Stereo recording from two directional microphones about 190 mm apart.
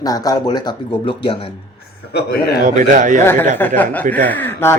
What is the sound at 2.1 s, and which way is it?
Speech, 55° left (ahead or behind).